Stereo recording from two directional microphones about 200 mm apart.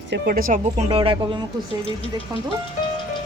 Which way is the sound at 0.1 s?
50° right (ahead or behind).